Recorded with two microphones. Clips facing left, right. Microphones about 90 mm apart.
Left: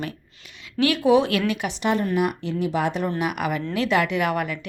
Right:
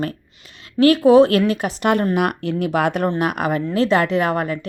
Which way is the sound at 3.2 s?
45° right (ahead or behind).